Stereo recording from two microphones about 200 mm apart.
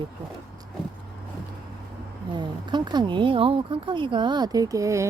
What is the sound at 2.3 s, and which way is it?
Speech, 20° right (ahead or behind).